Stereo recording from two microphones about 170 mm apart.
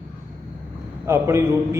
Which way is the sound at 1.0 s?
15° right (ahead or behind).